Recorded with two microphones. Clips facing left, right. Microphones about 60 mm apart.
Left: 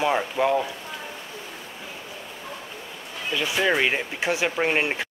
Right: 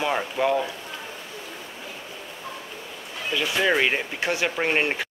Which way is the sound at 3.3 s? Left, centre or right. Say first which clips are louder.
Even; centre.